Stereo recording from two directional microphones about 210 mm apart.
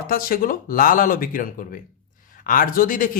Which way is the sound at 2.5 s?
40° left (ahead or behind).